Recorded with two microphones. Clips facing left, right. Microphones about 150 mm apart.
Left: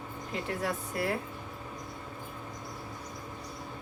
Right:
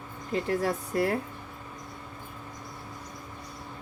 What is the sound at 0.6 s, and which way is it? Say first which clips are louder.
Speech: right 5 dB; 40° right (ahead or behind).